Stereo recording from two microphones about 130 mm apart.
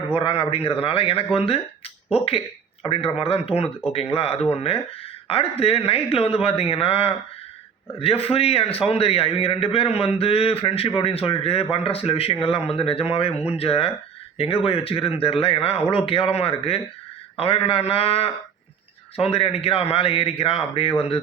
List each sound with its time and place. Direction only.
0.2 s a man's voice: 45° left (ahead or behind)